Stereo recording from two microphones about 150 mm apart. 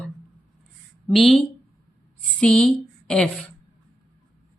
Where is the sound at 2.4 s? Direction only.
5° left (ahead or behind).